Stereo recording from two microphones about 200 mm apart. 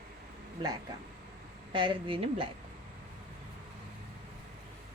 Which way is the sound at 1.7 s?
25° right (ahead or behind).